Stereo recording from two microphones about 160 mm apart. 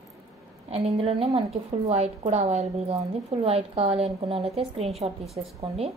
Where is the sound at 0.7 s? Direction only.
40° right (ahead or behind).